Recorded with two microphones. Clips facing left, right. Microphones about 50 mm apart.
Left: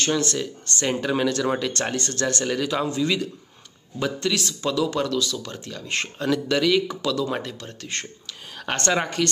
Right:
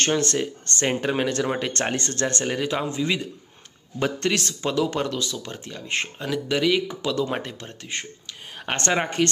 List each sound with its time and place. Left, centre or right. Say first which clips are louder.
0.0 s speech: right 1 dB; right
4.0 s speech: right 1 dB; right; by 7.0 s centre
7.0 s speech: even; right